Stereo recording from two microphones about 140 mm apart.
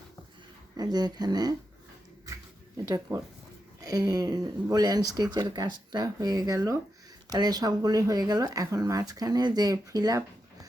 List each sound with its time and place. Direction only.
0.8 s speech: 30° right (ahead or behind)
2.7 s speech: 30° right (ahead or behind)